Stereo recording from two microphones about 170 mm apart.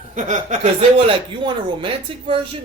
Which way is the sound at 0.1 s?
45° right (ahead or behind).